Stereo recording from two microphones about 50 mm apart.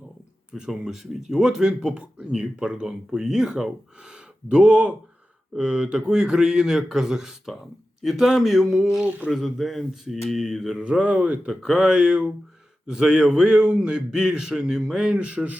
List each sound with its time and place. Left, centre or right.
0.7 s a man's voice: centre
2.1 s speech: right
2.8 s a man's voice: centre
9.0 s speech: right
9.3 s speech: centre
10.8 s a man's voice: right